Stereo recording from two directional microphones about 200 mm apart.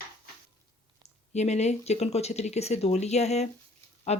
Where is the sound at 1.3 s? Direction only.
35° left (ahead or behind).